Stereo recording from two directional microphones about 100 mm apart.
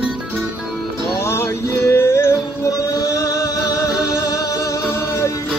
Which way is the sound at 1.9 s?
25° left (ahead or behind).